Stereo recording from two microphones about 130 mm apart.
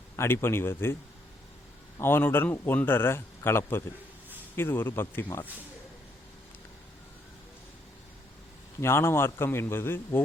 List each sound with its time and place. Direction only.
0.2 s a man's voice: 20° left (ahead or behind)
2.0 s a man's voice: 15° left (ahead or behind)
8.8 s a man's voice: 20° left (ahead or behind)